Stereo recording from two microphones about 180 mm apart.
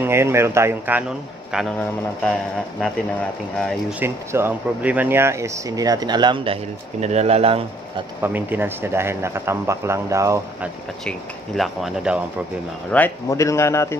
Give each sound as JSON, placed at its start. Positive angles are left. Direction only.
{"t": 0.0, "sound": "a man's voice", "side_deg": -15}
{"t": 4.0, "sound": "speech", "side_deg": -15}
{"t": 8.2, "sound": "a man's voice", "side_deg": -10}
{"t": 11.1, "sound": "speech", "side_deg": 0}
{"t": 12.9, "sound": "a man's voice", "side_deg": 15}